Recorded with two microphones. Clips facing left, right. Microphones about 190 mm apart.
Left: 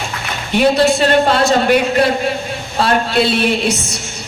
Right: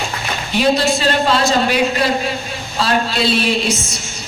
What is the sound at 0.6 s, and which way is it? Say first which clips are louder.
A man's voice: left 4 dB; 55° left (ahead or behind).